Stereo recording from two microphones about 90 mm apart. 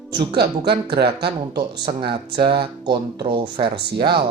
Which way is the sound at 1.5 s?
65° right (ahead or behind).